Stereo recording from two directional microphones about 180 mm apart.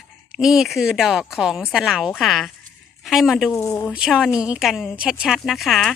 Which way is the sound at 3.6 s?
15° left (ahead or behind).